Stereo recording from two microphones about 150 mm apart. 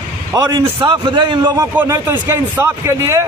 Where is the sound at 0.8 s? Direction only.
35° right (ahead or behind).